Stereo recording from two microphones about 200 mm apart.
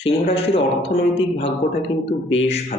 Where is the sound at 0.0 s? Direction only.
30° left (ahead or behind).